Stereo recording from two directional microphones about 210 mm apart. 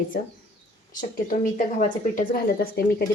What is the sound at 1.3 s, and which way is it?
A woman's voice, 40° left (ahead or behind).